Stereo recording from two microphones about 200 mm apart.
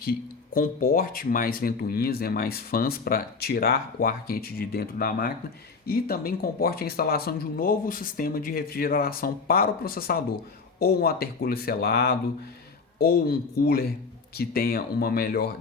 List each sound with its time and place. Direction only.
0.0 s speech: 45° left (ahead or behind)